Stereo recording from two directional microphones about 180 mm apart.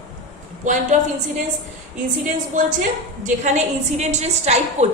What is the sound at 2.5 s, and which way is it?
A woman's voice, 45° right (ahead or behind).